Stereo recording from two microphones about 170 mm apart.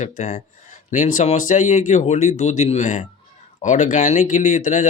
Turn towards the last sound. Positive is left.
turn(degrees=45)  # may be behind; listen again after turning